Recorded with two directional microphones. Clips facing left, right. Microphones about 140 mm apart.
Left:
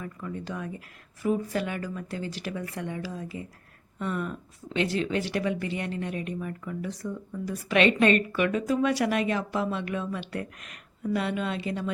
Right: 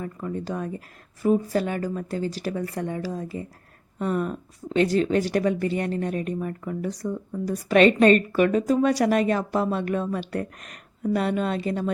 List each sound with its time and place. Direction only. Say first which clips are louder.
0.0 s speech: right 5 dB; 40° right (ahead or behind)